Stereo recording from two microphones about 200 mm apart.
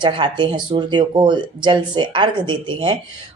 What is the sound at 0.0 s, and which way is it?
Speech, 25° right (ahead or behind).